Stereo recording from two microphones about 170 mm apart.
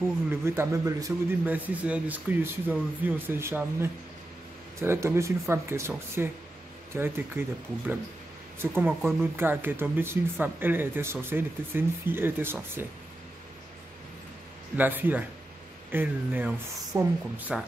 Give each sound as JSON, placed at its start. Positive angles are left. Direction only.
{"t": 0.3, "sound": "speech", "side_deg": -15}
{"t": 8.5, "sound": "speech", "side_deg": -15}
{"t": 14.8, "sound": "speech", "side_deg": -10}